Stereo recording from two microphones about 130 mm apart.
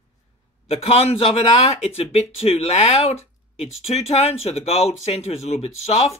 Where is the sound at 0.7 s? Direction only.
50° left (ahead or behind).